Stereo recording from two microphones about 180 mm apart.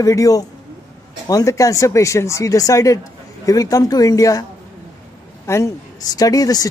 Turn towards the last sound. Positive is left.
turn(degrees=20)  # may be behind; listen again after turning